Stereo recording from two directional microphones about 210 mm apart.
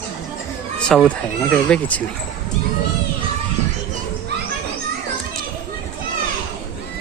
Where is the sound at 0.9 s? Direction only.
Centre (ahead or behind).